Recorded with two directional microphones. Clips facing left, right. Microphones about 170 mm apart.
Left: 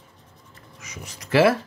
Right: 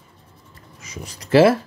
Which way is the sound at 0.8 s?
30° right (ahead or behind).